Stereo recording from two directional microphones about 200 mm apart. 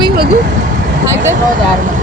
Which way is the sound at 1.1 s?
10° right (ahead or behind).